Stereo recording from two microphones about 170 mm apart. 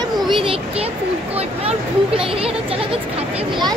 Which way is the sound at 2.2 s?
35° right (ahead or behind).